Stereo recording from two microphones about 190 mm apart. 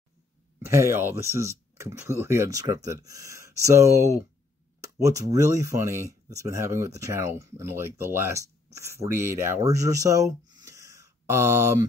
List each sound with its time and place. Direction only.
0.6 s speech: 15° right (ahead or behind)